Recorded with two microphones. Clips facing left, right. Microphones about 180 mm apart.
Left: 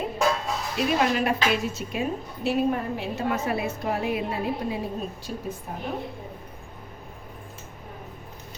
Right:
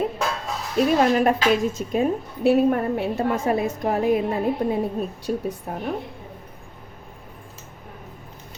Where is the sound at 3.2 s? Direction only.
45° right (ahead or behind).